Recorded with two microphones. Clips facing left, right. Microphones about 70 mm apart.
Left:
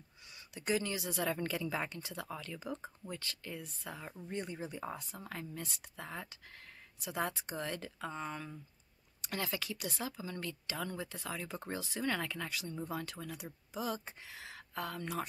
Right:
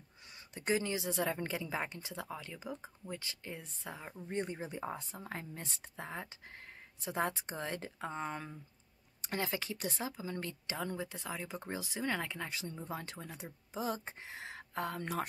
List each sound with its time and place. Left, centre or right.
0.6 s speech: right